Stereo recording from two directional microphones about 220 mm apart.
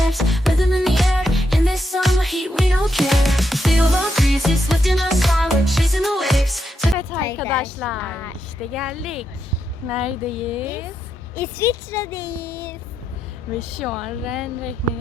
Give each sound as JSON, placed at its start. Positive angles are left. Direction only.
{"t": 0.1, "sound": "music", "side_deg": 0}
{"t": 7.3, "sound": "a sound", "side_deg": 5}
{"t": 8.7, "sound": "speech", "side_deg": 0}
{"t": 11.3, "sound": "speech", "side_deg": 10}
{"t": 13.5, "sound": "speech", "side_deg": 0}